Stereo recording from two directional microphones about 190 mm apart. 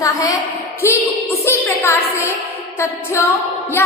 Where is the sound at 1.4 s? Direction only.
10° left (ahead or behind).